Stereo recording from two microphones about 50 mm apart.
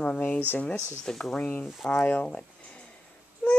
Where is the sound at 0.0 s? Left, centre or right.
Left.